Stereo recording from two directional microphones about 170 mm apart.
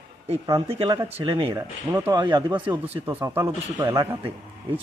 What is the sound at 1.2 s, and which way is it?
Speech, 30° right (ahead or behind).